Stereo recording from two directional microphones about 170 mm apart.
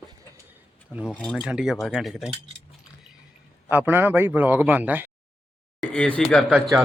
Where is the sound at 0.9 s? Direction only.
5° right (ahead or behind).